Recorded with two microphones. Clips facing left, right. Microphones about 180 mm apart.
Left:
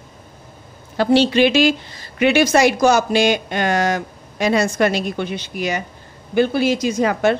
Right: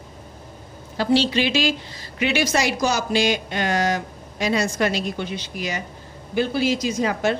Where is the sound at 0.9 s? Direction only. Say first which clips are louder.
Left 5 dB; 60° left (ahead or behind).